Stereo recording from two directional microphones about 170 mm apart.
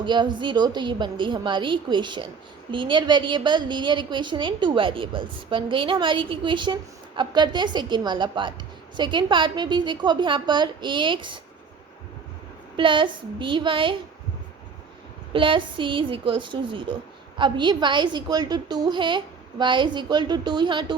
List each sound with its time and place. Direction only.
0.0 s a woman's voice: 25° right (ahead or behind)
12.7 s a woman's voice: 30° right (ahead or behind)
15.3 s a woman's voice: 30° right (ahead or behind)